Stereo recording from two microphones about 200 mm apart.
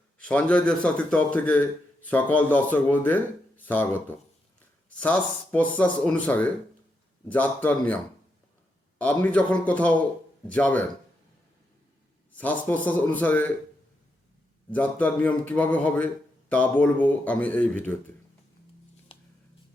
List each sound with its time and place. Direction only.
0.2 s a man's voice: 5° left (ahead or behind)
4.9 s a man's voice: 5° left (ahead or behind)
9.0 s a man's voice: 5° left (ahead or behind)
12.4 s a man's voice: 10° left (ahead or behind)
14.7 s a man's voice: 5° left (ahead or behind)
19.1 s a sound: 25° left (ahead or behind)